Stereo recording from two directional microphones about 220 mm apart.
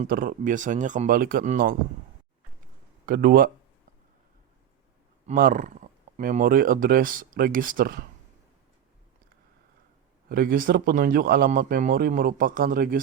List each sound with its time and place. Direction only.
0.0 s speech: 40° right (ahead or behind)
3.1 s speech: 40° right (ahead or behind)
5.2 s speech: 40° right (ahead or behind)
10.2 s speech: 40° right (ahead or behind)